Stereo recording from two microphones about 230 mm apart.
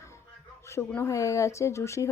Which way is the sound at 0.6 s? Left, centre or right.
Centre.